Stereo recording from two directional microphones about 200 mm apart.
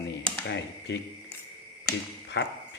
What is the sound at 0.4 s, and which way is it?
Speech, 60° left (ahead or behind).